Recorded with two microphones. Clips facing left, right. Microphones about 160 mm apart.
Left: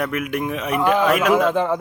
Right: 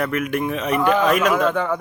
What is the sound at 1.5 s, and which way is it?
Speech, 25° left (ahead or behind).